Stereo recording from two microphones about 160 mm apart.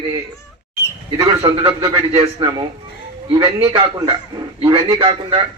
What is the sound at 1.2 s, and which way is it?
A man's voice, 25° right (ahead or behind).